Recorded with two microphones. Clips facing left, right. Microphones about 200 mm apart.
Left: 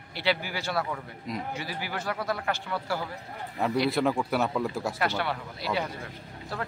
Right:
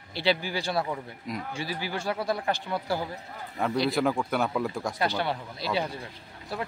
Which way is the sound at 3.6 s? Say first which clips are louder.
Even; centre (ahead or behind).